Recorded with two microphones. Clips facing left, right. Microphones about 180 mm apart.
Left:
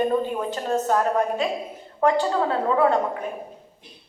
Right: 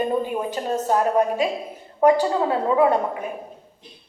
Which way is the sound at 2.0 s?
15° right (ahead or behind).